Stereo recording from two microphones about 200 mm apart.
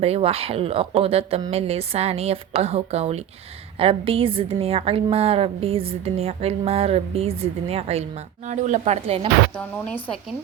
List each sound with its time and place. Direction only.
0.0 s a woman's voice: 30° right (ahead or behind)
9.6 s speech: 5° left (ahead or behind)